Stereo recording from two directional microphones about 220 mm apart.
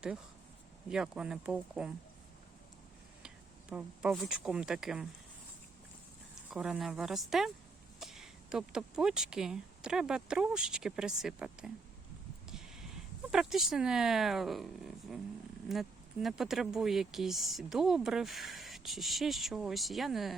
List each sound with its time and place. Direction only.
0.9 s speech: 5° right (ahead or behind)
3.2 s speech: 5° right (ahead or behind)
6.5 s speech: centre (ahead or behind)